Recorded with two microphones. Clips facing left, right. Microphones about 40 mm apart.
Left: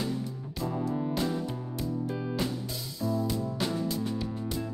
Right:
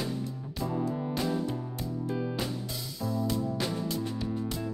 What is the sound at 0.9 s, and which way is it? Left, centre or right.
Music, centre.